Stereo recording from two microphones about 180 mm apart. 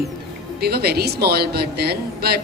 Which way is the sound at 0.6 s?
60° right (ahead or behind).